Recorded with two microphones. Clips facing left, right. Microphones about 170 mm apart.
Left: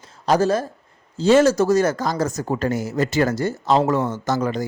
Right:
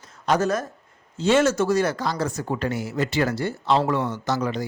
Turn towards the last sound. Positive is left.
turn(degrees=45)  # may be behind; listen again after turning